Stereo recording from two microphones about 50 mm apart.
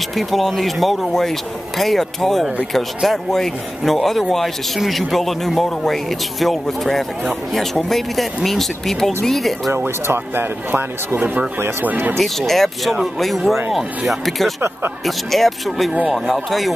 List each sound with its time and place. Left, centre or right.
0.1 s speech: centre
10.0 s speech: right
12.2 s speech: centre